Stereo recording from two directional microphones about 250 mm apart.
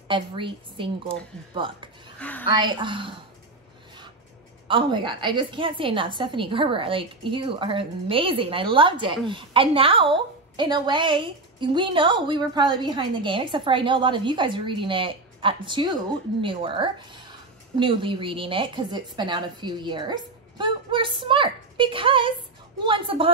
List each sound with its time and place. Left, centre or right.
0.1 s a woman's voice: centre
2.1 s a sound: centre
2.5 s a woman's voice: centre
4.6 s a woman's voice: centre